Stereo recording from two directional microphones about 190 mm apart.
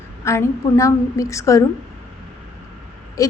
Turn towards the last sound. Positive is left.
turn(degrees=15)  # may be behind; listen again after turning